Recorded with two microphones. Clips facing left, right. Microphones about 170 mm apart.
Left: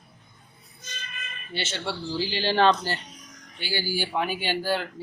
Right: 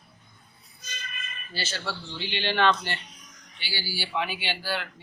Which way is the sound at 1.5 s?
25° left (ahead or behind).